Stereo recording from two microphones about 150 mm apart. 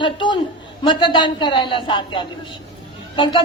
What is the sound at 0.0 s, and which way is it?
A man's voice, 30° left (ahead or behind).